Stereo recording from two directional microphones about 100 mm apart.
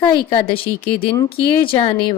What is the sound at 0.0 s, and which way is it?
A woman's voice, 55° left (ahead or behind).